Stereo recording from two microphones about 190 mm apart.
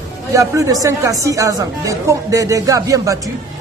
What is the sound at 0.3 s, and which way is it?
Speech, 15° right (ahead or behind).